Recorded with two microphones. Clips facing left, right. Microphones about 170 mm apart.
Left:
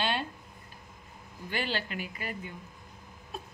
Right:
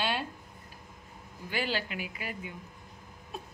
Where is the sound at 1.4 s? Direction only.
10° right (ahead or behind).